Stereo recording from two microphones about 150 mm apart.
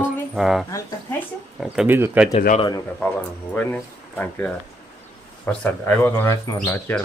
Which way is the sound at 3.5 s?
10° left (ahead or behind).